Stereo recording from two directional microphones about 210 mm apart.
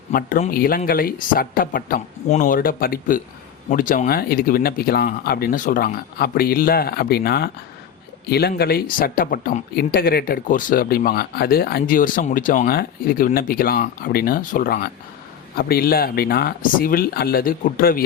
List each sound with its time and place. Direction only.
0.1 s speech: 40° left (ahead or behind)